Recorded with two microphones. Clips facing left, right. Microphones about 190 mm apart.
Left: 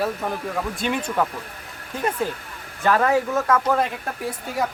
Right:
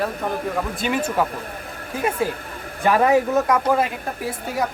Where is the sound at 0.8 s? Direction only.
5° right (ahead or behind).